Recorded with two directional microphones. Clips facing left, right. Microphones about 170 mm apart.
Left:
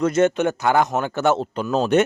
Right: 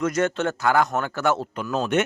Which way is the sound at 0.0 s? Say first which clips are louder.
Left 5 dB; 25° left (ahead or behind).